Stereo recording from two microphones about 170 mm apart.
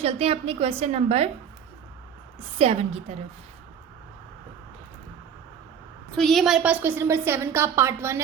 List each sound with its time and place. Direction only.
0.0 s a woman's voice: 35° right (ahead or behind)
2.6 s a woman's voice: 35° right (ahead or behind)
6.1 s a woman's voice: 5° left (ahead or behind); by 8.2 s 15° right (ahead or behind)